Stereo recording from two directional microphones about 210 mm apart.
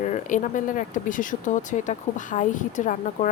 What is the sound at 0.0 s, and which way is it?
Speech, 35° left (ahead or behind).